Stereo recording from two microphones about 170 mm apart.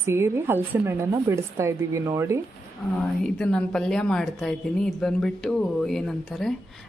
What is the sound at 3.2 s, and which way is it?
Speech, 5° left (ahead or behind).